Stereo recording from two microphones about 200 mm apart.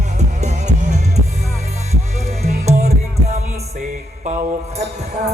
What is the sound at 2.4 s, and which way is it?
Music, 35° right (ahead or behind).